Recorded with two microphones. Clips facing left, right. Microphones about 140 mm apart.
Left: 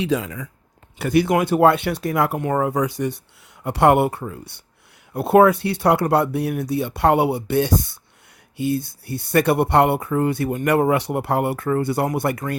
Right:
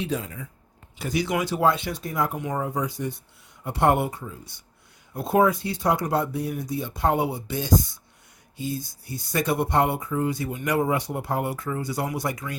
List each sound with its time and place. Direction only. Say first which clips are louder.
0.0 s speech: left 7 dB; 90° left
0.9 s speech: left 8 dB; 60° left (ahead or behind)